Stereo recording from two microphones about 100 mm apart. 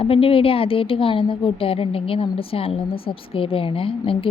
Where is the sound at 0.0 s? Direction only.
65° left (ahead or behind).